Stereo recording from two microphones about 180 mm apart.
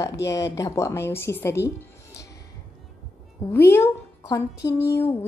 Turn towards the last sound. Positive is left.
turn(degrees=15)  # may be behind; listen again after turning